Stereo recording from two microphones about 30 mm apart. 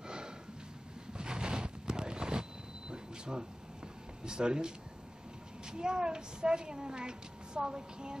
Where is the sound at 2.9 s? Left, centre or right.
Right.